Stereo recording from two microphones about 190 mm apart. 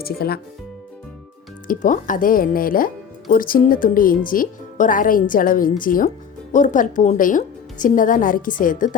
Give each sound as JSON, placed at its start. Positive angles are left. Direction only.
{"t": 0.0, "sound": "speech", "side_deg": 55}
{"t": 1.6, "sound": "speech", "side_deg": 45}